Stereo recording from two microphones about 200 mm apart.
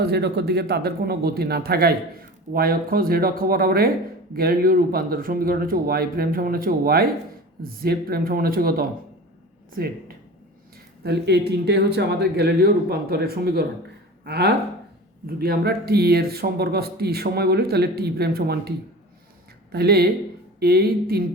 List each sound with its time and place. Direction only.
0.0 s speech: 55° right (ahead or behind)
11.0 s speech: 55° right (ahead or behind)
19.7 s speech: 50° right (ahead or behind)